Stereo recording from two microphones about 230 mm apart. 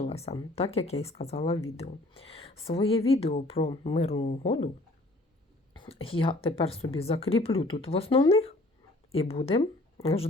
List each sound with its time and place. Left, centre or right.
0.0 s speech: left
5.7 s speech: left